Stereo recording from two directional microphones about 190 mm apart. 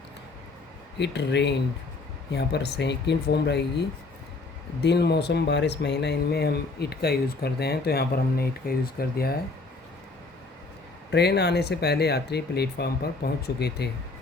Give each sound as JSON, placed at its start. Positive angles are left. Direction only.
{"t": 0.9, "sound": "speech", "side_deg": 65}
{"t": 11.1, "sound": "speech", "side_deg": 60}